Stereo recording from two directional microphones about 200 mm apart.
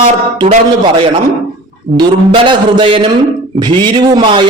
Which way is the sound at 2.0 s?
25° right (ahead or behind).